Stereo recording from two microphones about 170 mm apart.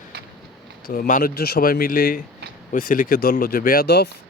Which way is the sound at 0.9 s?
55° left (ahead or behind).